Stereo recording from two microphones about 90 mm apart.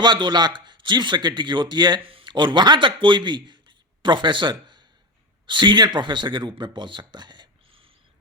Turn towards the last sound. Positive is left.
turn(degrees=-55)  # may be behind; listen again after turning